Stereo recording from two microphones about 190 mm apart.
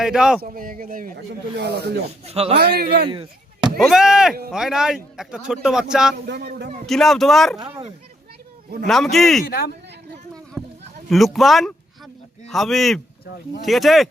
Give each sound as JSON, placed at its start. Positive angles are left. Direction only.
{"t": 0.0, "sound": "speech", "side_deg": -5}
{"t": 0.4, "sound": "speech", "side_deg": -45}
{"t": 2.2, "sound": "speech", "side_deg": -30}
{"t": 2.6, "sound": "a man's voice", "side_deg": -55}
{"t": 3.1, "sound": "chop", "side_deg": -25}
{"t": 3.8, "sound": "speech", "side_deg": 0}
{"t": 6.2, "sound": "a man's voice", "side_deg": -60}
{"t": 6.8, "sound": "speech", "side_deg": 0}
{"t": 8.9, "sound": "speech", "side_deg": 0}
{"t": 9.4, "sound": "speech", "side_deg": 50}
{"t": 11.1, "sound": "speech", "side_deg": 0}